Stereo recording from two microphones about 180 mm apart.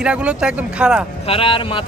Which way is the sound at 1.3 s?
30° left (ahead or behind).